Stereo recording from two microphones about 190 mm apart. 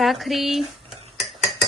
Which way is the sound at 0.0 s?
Centre (ahead or behind).